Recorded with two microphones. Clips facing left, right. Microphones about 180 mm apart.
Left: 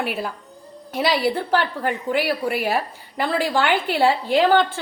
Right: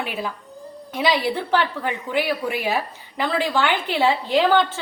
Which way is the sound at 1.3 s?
50° left (ahead or behind).